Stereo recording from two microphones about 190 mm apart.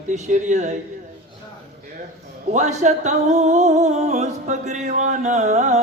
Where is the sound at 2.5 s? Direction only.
35° right (ahead or behind).